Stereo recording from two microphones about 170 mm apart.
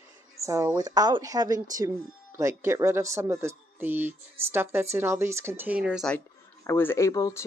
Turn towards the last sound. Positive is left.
turn(degrees=20)  # may be behind; listen again after turning